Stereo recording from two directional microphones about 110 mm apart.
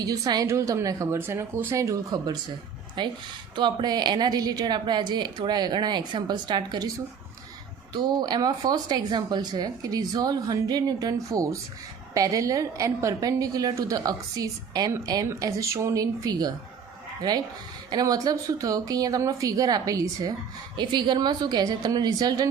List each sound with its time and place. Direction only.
0.0 s a woman's voice: 35° right (ahead or behind)
7.9 s a woman's voice: 40° right (ahead or behind)
20.7 s speech: 45° right (ahead or behind)